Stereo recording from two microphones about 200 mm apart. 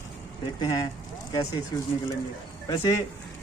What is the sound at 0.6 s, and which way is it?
Speech, 20° left (ahead or behind).